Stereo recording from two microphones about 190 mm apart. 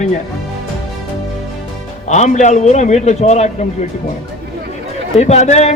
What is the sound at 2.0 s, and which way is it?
A man's voice, 40° left (ahead or behind).